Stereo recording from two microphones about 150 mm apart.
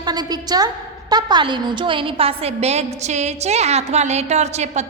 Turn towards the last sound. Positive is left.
turn(degrees=-50)  # may be behind; listen again after turning